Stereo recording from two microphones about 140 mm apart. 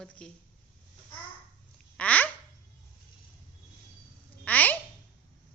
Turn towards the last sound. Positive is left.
turn(degrees=10)  # may be behind; listen again after turning